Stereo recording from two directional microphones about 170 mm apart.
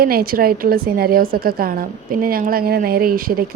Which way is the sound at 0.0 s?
60° right (ahead or behind).